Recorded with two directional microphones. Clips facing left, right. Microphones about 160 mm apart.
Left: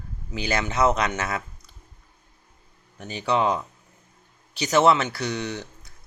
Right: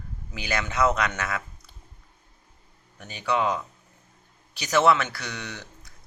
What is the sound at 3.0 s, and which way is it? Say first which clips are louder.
Speech: left 3 dB; 25° left (ahead or behind).